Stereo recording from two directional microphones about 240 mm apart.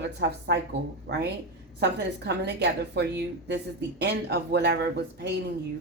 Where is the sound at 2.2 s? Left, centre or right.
Right.